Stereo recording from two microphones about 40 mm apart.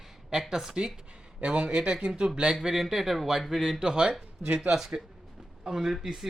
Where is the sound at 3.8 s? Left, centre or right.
Centre.